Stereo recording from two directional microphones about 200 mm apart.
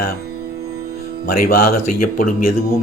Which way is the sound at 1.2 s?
50° left (ahead or behind).